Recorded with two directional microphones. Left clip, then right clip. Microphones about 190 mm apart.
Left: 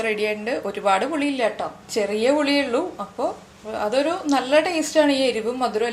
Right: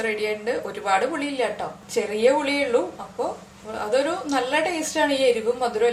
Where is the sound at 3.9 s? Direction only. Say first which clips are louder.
Left 1 dB; 40° left (ahead or behind).